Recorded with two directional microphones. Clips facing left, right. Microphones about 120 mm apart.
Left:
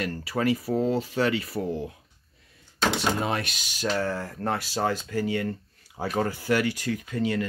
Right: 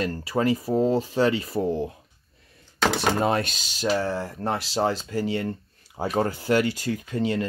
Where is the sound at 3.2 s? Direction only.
35° right (ahead or behind).